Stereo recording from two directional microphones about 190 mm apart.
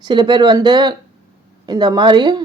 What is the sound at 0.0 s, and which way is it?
Speech, 25° right (ahead or behind).